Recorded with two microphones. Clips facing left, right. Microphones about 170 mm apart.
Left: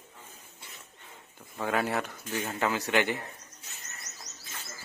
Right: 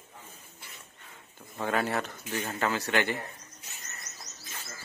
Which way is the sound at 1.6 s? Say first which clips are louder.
Even; 5° left (ahead or behind).